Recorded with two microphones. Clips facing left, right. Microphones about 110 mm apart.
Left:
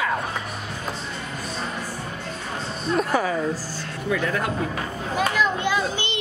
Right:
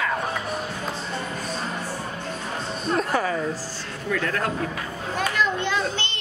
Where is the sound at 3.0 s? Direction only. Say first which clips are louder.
Left 2 dB; 5° left (ahead or behind).